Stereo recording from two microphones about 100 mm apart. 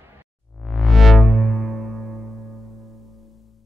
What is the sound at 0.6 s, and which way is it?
Music, centre (ahead or behind).